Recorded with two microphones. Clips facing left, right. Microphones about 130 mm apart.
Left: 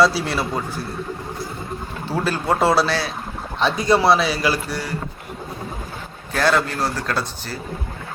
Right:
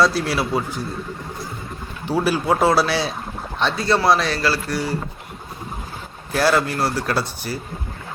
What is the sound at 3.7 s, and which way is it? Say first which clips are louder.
Speech: left 3 dB; 15° left (ahead or behind).